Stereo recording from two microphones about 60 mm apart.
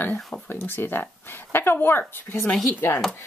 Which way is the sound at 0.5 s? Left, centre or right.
Left.